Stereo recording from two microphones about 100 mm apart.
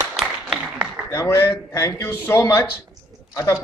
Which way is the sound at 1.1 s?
25° left (ahead or behind).